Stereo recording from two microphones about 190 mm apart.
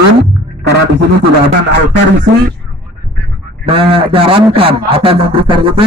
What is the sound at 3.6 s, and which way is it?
A man's voice, 30° right (ahead or behind).